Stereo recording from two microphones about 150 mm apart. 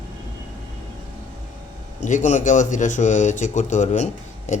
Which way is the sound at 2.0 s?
55° left (ahead or behind).